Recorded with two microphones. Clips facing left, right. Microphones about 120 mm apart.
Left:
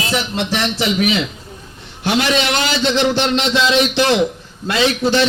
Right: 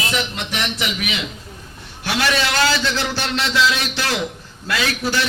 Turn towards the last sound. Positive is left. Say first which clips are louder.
# left 6 dB
turn(degrees=25)  # may be behind; listen again after turning